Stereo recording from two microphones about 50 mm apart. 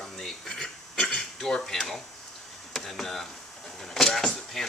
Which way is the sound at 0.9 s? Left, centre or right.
Left.